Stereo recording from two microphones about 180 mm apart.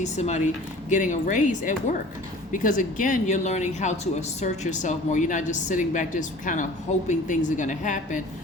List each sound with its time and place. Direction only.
0.0 s speech: 40° left (ahead or behind)